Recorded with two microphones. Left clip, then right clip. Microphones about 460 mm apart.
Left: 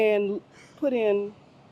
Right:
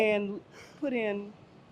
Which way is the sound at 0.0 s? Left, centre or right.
Left.